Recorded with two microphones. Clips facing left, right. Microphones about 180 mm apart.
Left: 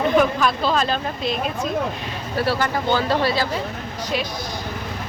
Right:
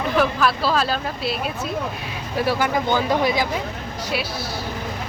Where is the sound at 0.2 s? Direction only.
5° right (ahead or behind).